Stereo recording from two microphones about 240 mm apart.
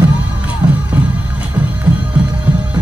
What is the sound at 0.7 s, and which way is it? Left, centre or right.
Music, centre.